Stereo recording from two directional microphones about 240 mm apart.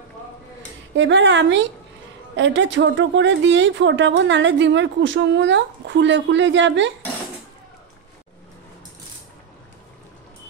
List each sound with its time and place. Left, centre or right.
0.9 s a woman's voice: right